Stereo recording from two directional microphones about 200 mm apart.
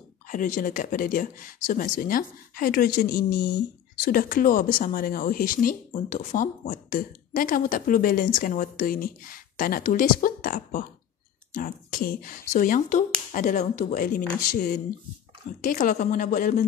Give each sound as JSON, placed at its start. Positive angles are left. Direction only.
{"t": 0.3, "sound": "speech", "side_deg": 40}